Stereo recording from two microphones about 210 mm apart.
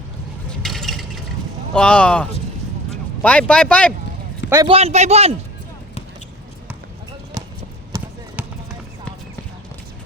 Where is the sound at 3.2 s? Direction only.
5° left (ahead or behind).